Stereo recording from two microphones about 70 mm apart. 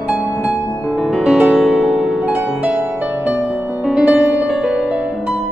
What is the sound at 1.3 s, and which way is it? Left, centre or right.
Music, centre.